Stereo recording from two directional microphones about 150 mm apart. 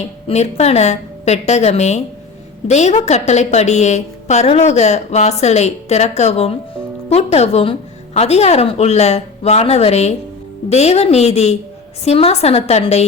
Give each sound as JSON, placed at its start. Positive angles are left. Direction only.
{"t": 0.0, "sound": "a woman's voice", "side_deg": 45}